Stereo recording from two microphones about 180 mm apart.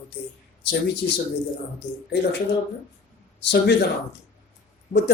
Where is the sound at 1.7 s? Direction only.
70° left (ahead or behind).